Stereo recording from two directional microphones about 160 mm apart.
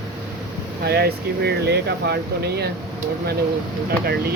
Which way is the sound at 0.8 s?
90° right.